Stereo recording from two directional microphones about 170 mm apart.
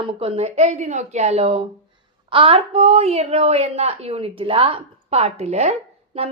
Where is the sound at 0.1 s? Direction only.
35° right (ahead or behind).